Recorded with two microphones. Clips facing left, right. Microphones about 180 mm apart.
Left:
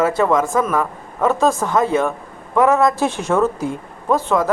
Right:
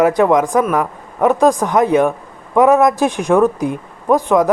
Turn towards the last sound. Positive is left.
turn(degrees=-15)  # may be behind; listen again after turning